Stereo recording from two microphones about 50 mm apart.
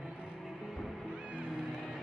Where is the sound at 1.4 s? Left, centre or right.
Centre.